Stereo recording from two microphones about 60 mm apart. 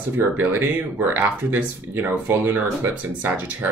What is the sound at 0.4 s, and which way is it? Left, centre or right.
Speech, right.